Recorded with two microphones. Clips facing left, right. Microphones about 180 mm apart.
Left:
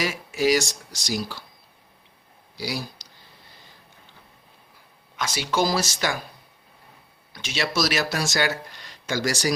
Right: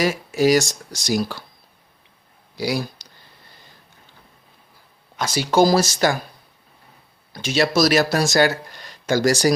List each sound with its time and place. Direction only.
0.0 s speech: 40° right (ahead or behind)
2.6 s speech: 55° right (ahead or behind)
5.1 s speech: 35° right (ahead or behind)
7.3 s speech: 40° right (ahead or behind)